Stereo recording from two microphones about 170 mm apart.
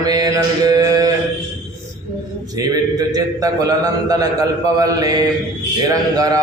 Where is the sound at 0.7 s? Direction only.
20° right (ahead or behind).